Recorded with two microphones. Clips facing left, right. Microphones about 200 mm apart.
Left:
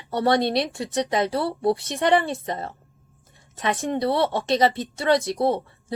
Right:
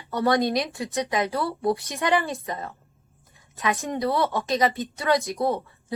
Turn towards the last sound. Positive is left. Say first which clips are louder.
# left 3 dB
turn(degrees=30)  # may be behind; listen again after turning